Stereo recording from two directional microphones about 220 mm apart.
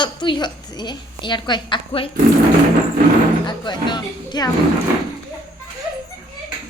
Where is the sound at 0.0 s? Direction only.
20° left (ahead or behind).